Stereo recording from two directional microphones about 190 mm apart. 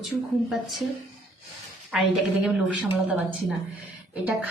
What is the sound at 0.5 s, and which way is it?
Speech, centre (ahead or behind).